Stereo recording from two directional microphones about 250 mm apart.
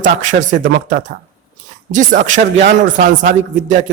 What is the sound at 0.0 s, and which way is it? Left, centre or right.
Speech, right.